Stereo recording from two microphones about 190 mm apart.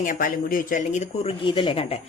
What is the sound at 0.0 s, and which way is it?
Speech, 45° left (ahead or behind).